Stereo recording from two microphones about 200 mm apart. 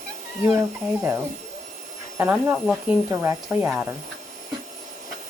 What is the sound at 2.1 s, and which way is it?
Speech, 10° right (ahead or behind).